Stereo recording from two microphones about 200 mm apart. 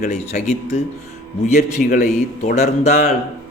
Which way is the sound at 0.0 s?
35° left (ahead or behind).